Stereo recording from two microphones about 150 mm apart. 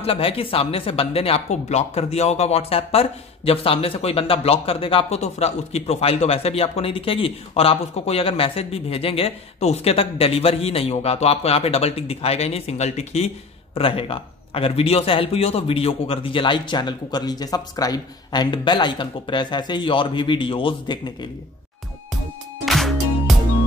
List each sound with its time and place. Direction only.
0.0 s speech: 40° left (ahead or behind)
22.7 s music: centre (ahead or behind)